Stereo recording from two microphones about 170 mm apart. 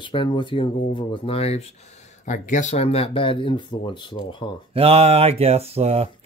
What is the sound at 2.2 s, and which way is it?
Speech, 50° left (ahead or behind).